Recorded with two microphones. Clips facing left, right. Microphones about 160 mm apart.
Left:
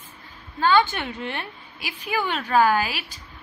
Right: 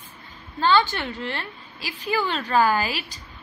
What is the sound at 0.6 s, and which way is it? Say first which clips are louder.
A woman's voice: left 1 dB; 15° left (ahead or behind).